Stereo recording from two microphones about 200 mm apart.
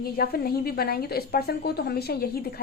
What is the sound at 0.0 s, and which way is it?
Speech, 50° left (ahead or behind).